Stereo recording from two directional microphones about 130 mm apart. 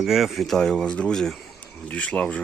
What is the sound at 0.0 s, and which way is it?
Speech, centre (ahead or behind).